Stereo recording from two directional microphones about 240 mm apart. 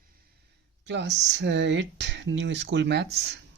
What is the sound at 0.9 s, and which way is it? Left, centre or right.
Speech, right.